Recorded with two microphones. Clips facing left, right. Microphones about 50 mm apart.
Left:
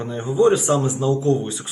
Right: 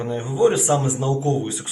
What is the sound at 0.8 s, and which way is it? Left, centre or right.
Speech, right.